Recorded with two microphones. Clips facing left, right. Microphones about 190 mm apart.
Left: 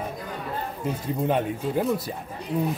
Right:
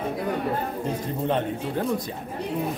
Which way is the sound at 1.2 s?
5° left (ahead or behind).